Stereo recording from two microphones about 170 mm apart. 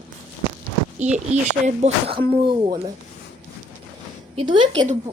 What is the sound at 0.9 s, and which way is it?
Speech, 45° right (ahead or behind).